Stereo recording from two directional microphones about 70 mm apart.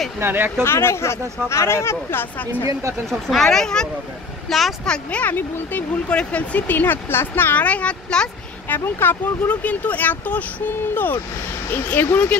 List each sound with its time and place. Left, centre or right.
0.2 s speech: right
0.7 s speech: left
3.1 s a woman's voice: centre
4.8 s speech: centre
5.2 s speech: left
8.6 s speech: left
11.7 s speech: left